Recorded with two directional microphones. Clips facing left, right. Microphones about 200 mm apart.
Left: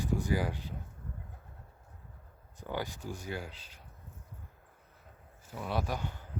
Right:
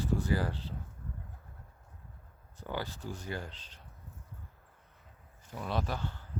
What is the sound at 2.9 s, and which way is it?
Speech, 10° left (ahead or behind).